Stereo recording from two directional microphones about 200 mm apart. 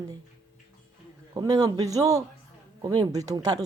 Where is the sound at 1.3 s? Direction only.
20° right (ahead or behind).